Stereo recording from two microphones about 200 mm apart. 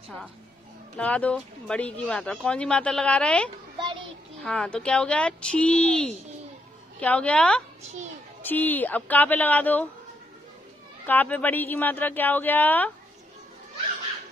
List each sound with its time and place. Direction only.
0.9 s speech: 5° left (ahead or behind)
3.7 s a sound: 25° right (ahead or behind)
4.4 s speech: 5° left (ahead or behind)
11.1 s speech: 10° left (ahead or behind)